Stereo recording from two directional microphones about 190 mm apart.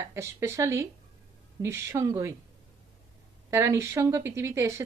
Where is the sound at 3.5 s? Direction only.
15° right (ahead or behind).